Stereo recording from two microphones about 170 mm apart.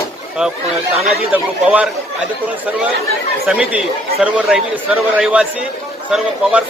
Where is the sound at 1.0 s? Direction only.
5° right (ahead or behind).